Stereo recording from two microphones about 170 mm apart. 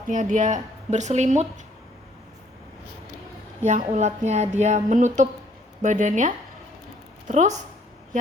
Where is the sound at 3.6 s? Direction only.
45° right (ahead or behind).